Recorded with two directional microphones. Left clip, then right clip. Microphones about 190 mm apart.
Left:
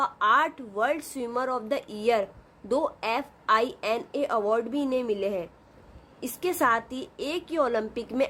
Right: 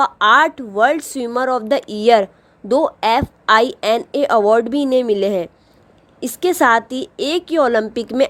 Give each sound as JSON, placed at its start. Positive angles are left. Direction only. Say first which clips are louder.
{"t": 0.0, "sound": "a woman's voice", "louder": "right 11 dB", "side_deg": -40}